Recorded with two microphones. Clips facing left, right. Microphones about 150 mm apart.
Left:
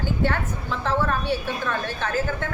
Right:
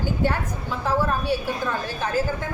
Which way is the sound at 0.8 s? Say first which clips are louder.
Right 1 dB; 10° right (ahead or behind).